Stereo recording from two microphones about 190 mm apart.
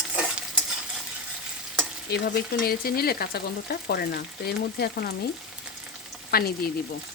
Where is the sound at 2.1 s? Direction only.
60° left (ahead or behind).